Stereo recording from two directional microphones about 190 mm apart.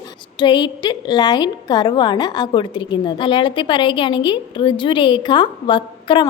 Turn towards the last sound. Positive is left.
turn(degrees=25)  # may be behind; listen again after turning